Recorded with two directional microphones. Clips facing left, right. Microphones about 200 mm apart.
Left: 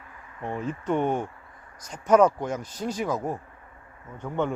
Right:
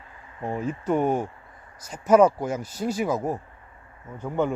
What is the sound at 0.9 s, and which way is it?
Speech, 5° right (ahead or behind).